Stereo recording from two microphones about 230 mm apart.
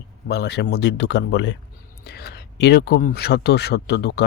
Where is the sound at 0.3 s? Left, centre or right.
Left.